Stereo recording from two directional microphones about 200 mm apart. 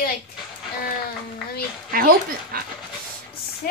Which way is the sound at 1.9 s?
45° right (ahead or behind).